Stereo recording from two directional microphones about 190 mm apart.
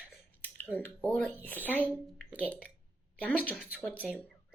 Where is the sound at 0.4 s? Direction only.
10° left (ahead or behind).